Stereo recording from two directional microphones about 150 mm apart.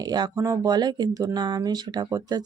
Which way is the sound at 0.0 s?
25° right (ahead or behind).